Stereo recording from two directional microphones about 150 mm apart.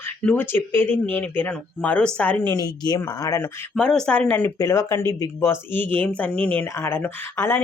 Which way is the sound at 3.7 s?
5° left (ahead or behind).